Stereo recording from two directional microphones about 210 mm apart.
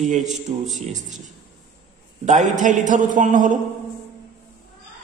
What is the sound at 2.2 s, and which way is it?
A man's voice, 35° right (ahead or behind).